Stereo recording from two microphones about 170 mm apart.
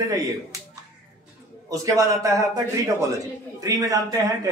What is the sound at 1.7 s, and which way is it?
A man's voice, 20° right (ahead or behind).